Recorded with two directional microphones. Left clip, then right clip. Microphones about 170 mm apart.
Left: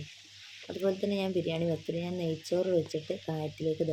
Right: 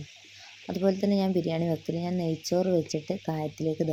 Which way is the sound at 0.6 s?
25° right (ahead or behind).